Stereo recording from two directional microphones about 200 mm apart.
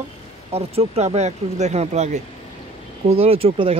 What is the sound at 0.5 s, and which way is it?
Speech, 30° right (ahead or behind).